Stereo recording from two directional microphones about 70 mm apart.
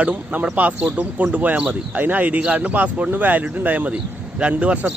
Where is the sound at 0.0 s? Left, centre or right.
Centre.